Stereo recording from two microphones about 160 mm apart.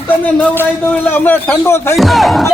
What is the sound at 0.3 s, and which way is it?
A man's voice, 10° left (ahead or behind).